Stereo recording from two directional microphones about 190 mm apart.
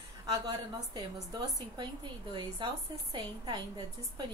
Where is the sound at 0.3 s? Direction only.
20° right (ahead or behind).